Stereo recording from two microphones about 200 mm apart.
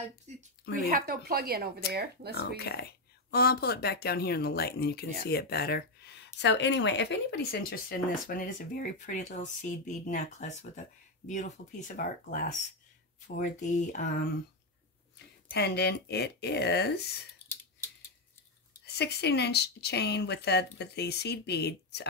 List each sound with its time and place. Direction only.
0.3 s speech: 35° right (ahead or behind)
0.8 s speech: 45° right (ahead or behind)
2.3 s speech: 55° left (ahead or behind)
8.3 s speech: 45° left (ahead or behind)
15.5 s speech: 55° left (ahead or behind)
18.9 s speech: 55° left (ahead or behind)